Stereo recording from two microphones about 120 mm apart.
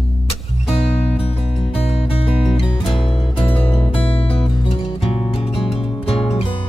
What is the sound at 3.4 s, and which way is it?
Music, 50° left (ahead or behind).